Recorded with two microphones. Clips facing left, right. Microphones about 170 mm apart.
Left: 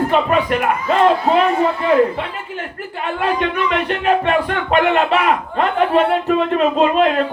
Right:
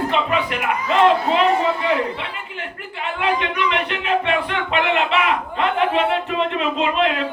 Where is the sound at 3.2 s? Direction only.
45° left (ahead or behind).